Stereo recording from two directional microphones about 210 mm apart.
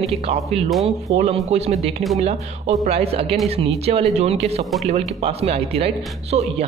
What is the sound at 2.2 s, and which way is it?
Speech, 30° right (ahead or behind).